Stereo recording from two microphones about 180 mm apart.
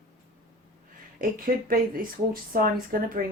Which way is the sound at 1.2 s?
50° right (ahead or behind).